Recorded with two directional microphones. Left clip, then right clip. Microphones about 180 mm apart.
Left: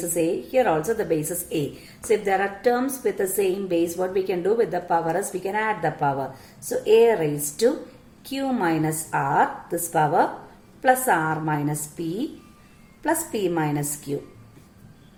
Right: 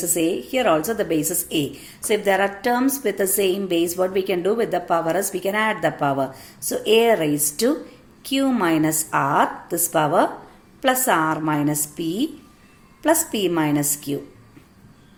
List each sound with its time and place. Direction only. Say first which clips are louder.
0.1 s a woman's voice: even; 30° right (ahead or behind)